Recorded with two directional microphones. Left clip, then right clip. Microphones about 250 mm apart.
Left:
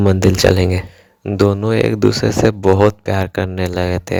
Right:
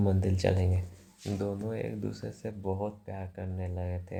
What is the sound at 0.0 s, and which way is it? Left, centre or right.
Speech, left.